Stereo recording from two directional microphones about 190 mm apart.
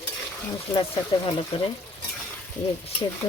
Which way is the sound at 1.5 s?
30° left (ahead or behind).